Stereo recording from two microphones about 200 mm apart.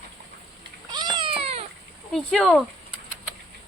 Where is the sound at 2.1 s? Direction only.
Centre (ahead or behind).